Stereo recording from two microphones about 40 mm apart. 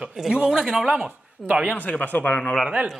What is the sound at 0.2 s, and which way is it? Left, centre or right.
Speech, centre.